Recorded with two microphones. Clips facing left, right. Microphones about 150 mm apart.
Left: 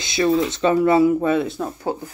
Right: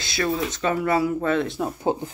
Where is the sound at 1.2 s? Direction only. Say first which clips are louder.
Left 3 dB; 10° left (ahead or behind).